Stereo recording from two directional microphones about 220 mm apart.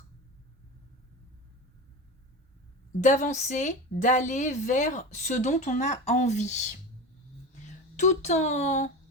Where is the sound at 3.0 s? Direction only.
35° left (ahead or behind).